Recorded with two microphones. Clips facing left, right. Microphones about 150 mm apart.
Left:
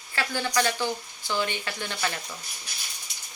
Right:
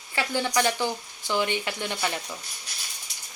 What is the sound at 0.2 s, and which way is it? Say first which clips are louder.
A woman's voice: right 2 dB; 20° right (ahead or behind).